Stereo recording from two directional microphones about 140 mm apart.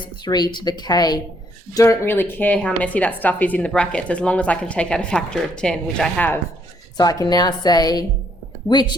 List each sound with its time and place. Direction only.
0.3 s a woman's voice: 30° left (ahead or behind); by 6.4 s 10° left (ahead or behind)
6.9 s a woman's voice: 25° left (ahead or behind)